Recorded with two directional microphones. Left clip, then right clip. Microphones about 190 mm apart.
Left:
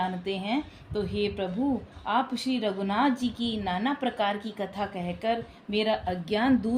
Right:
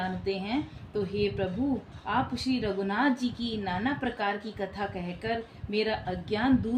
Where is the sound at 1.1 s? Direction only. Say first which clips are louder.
Right 1 dB; 40° left (ahead or behind).